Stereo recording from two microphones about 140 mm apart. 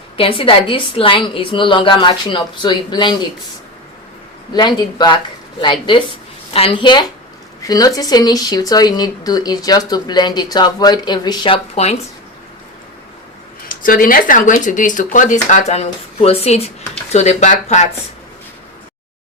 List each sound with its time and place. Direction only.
0.2 s a woman's voice: 40° left (ahead or behind)
4.5 s a woman's voice: 30° left (ahead or behind); by 11.9 s 45° left (ahead or behind)
13.7 s speech: 75° left (ahead or behind); by 17.8 s 55° left (ahead or behind)